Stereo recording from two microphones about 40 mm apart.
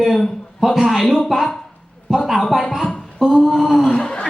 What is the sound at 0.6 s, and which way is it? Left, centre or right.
A woman's voice, centre.